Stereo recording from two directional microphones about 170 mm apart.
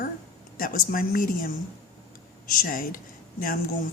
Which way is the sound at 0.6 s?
55° left (ahead or behind).